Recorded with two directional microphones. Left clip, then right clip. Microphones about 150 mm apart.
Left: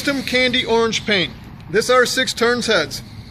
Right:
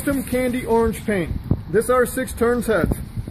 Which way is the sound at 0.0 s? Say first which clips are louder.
Left 4 dB; 45° right (ahead or behind).